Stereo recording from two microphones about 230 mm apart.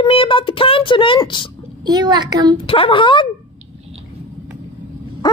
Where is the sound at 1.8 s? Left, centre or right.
Centre.